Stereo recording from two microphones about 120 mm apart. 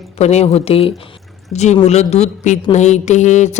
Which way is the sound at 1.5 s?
70° left (ahead or behind).